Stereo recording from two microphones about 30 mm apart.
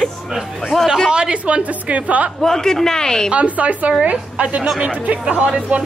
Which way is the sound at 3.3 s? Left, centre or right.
Right.